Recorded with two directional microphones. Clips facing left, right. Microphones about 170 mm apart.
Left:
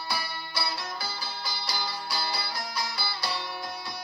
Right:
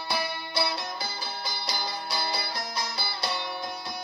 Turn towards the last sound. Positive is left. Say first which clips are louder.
# right 1 dB
turn(degrees=-20)  # may be behind; listen again after turning